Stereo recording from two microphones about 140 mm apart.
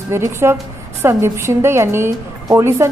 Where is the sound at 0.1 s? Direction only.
20° right (ahead or behind).